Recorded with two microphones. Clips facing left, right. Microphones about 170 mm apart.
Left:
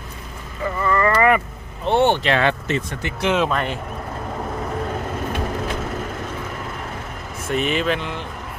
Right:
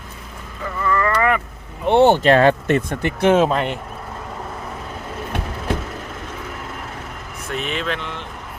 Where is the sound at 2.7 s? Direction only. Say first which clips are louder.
Right 5 dB; 55° right (ahead or behind).